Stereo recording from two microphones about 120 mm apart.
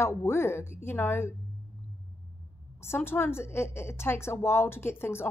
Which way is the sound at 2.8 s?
20° left (ahead or behind).